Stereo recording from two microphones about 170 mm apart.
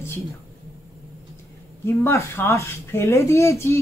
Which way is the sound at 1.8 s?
15° left (ahead or behind).